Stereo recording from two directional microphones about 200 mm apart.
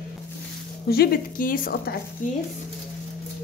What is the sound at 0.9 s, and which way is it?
A woman's voice, 50° left (ahead or behind).